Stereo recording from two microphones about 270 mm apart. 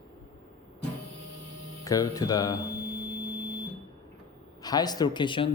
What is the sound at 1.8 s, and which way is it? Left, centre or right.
Speech, centre.